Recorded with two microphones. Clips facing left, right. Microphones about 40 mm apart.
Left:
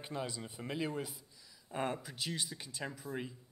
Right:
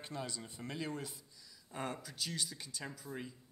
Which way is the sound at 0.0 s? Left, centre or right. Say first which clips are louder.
Left 3 dB; centre.